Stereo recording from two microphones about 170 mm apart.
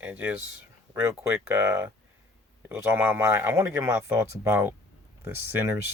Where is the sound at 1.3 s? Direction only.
10° right (ahead or behind).